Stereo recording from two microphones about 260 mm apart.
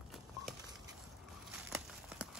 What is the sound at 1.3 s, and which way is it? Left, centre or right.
Crumpling, centre.